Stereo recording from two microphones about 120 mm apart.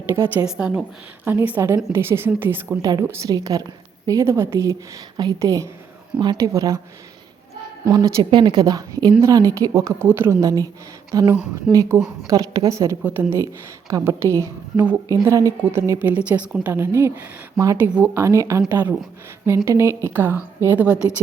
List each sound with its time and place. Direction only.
0.1 s a woman's voice: 20° right (ahead or behind)
0.4 s a woman's voice: 5° right (ahead or behind)
3.2 s a woman's voice: 30° right (ahead or behind)
7.9 s a woman's voice: 30° right (ahead or behind)
13.0 s a woman's voice: 15° right (ahead or behind)
13.9 s a woman's voice: 25° right (ahead or behind)